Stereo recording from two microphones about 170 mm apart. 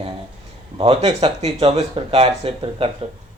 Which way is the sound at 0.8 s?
35° right (ahead or behind).